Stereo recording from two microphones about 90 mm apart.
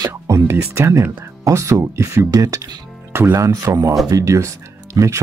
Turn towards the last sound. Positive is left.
turn(degrees=-35)  # may be behind; listen again after turning